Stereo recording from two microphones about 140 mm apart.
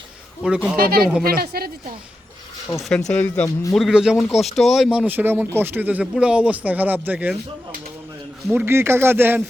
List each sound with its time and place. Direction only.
0.4 s speech: 5° right (ahead or behind)
0.8 s speech: 90° right
2.9 s speech: 10° left (ahead or behind)
3.4 s a man's voice: 20° left (ahead or behind)
3.8 s speech: centre (ahead or behind)
8.5 s speech: 15° right (ahead or behind)